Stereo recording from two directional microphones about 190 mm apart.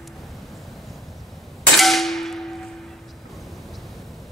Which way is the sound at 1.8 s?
Centre (ahead or behind).